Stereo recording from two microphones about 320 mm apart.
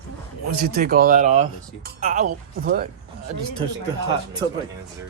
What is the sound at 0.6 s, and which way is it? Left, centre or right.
Speech, right.